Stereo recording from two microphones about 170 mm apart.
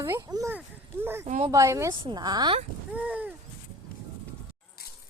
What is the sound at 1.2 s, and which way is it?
Speech, 45° right (ahead or behind).